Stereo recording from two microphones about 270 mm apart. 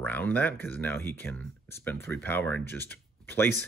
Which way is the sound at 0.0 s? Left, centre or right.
Centre.